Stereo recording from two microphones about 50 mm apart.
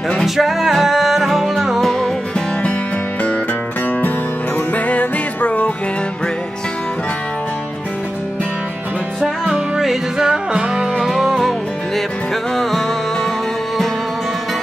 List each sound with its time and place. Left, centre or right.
0.2 s music: centre
4.7 s music: left
9.8 s music: centre
10.2 s music: centre
12.5 s music: centre